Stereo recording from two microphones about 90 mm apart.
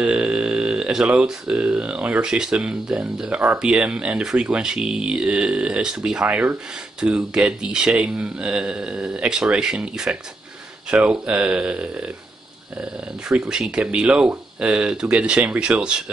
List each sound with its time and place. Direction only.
0.0 s speech: 15° right (ahead or behind)
13.3 s speech: 10° right (ahead or behind)